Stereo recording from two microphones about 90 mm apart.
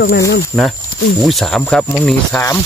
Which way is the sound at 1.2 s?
5° left (ahead or behind).